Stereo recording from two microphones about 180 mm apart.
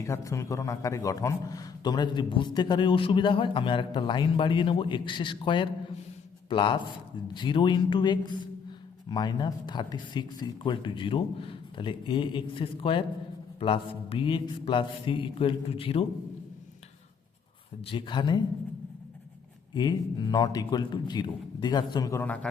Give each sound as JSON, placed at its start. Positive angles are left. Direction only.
{"t": 0.0, "sound": "a man's voice", "side_deg": 15}
{"t": 17.9, "sound": "a man's voice", "side_deg": 25}
{"t": 19.7, "sound": "a man's voice", "side_deg": 25}